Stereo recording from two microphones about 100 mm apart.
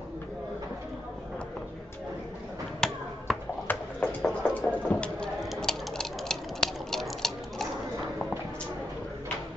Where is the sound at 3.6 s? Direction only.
15° left (ahead or behind).